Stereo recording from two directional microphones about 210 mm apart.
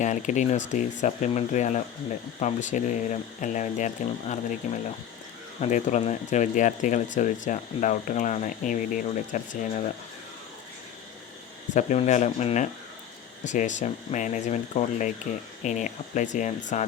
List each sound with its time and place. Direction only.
0.0 s speech: 35° left (ahead or behind)
11.7 s speech: 35° left (ahead or behind)